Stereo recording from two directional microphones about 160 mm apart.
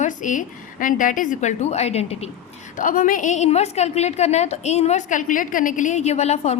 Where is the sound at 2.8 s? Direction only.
55° left (ahead or behind).